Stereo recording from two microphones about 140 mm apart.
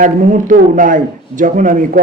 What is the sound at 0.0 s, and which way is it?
A man's voice, 65° right (ahead or behind).